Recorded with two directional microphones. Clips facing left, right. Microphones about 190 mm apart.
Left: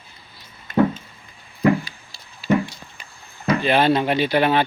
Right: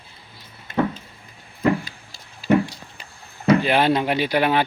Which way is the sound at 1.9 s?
45° right (ahead or behind).